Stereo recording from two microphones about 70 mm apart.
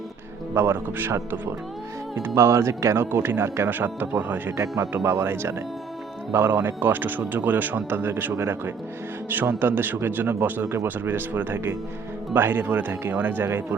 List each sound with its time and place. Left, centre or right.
0.5 s speech: right
5.0 s speech: right